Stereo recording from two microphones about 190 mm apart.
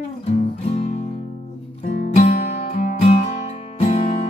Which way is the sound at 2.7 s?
30° left (ahead or behind).